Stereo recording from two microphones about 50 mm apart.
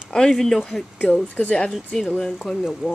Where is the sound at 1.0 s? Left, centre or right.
Left.